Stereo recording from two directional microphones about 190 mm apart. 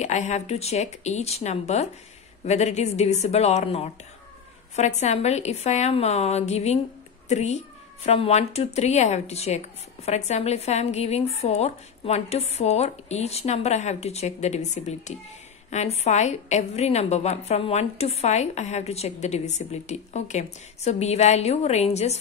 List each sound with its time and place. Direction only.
0.0 s speech: 40° left (ahead or behind)